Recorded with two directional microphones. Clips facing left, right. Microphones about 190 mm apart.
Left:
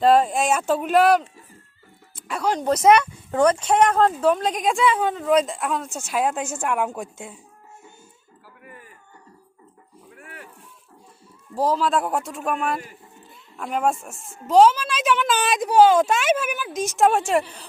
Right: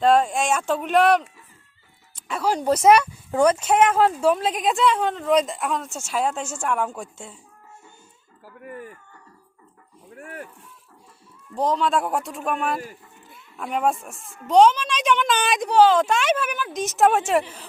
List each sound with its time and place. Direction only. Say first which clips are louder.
0.0 s speech: left 1 dB; centre (ahead or behind)
2.1 s music: even; centre (ahead or behind)
2.8 s speech: even; 10° right (ahead or behind)
6.0 s a woman's voice: left 2 dB; 15° left (ahead or behind)
10.2 s a sound: right 7 dB; 45° right (ahead or behind)
11.5 s speech: left 1 dB; 5° left (ahead or behind)